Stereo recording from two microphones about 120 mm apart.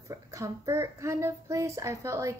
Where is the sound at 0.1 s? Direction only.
25° right (ahead or behind).